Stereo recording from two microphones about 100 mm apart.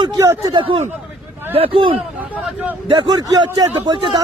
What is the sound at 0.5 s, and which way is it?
A man's voice, 60° right (ahead or behind).